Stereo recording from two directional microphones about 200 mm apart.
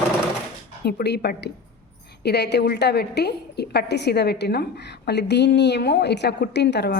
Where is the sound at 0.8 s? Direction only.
55° left (ahead or behind).